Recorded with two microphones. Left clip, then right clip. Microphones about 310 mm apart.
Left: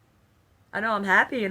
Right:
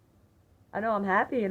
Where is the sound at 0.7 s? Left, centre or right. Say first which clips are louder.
Left 5 dB; centre.